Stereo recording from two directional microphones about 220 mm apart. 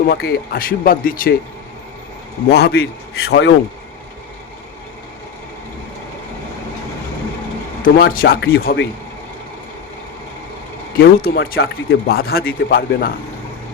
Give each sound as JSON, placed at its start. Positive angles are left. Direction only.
{"t": 0.1, "sound": "speech", "side_deg": 45}
{"t": 2.5, "sound": "speech", "side_deg": 45}
{"t": 7.9, "sound": "speech", "side_deg": 40}
{"t": 10.9, "sound": "speech", "side_deg": 45}